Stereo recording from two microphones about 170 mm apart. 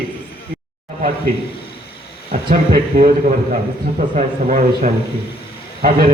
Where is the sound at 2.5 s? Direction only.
55° right (ahead or behind).